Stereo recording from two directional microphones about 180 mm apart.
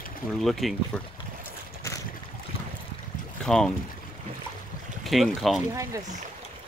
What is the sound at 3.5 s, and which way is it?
Speech, 5° left (ahead or behind).